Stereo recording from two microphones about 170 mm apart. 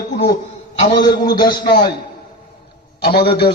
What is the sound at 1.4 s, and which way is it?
Speech, 25° left (ahead or behind).